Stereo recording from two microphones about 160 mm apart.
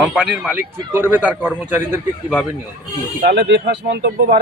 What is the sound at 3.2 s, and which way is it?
Speech, 90° right.